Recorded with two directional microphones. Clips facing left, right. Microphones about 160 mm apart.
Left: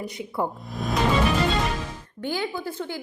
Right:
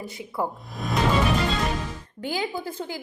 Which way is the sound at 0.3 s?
Centre (ahead or behind).